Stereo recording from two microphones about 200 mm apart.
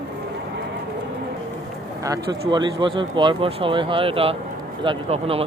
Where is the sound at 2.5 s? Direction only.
25° right (ahead or behind).